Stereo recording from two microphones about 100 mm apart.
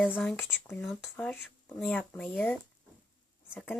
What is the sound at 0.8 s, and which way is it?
Speech, centre (ahead or behind).